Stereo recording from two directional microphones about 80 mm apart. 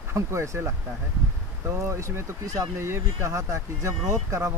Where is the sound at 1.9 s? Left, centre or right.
Right.